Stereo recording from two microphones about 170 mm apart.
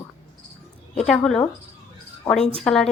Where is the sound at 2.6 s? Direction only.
5° left (ahead or behind).